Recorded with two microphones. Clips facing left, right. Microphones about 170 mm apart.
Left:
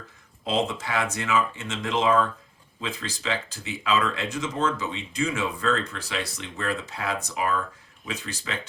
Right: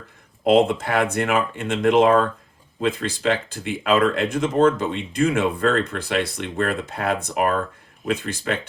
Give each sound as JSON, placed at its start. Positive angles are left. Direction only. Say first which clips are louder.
{"t": 0.4, "sound": "speech", "louder": "right 10 dB", "side_deg": -55}